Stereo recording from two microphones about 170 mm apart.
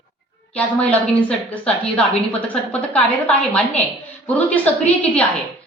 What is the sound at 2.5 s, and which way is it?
Speech, 5° left (ahead or behind).